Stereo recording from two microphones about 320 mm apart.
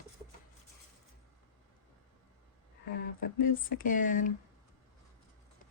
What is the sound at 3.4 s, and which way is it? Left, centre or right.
Speech, left.